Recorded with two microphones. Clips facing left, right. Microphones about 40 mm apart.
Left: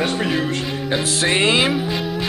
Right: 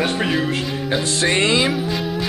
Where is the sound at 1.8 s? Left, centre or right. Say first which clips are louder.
Even; centre.